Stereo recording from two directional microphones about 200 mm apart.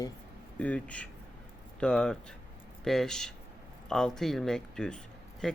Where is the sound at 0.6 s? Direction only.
5° left (ahead or behind).